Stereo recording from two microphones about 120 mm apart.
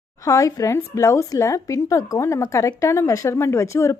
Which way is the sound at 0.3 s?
25° left (ahead or behind).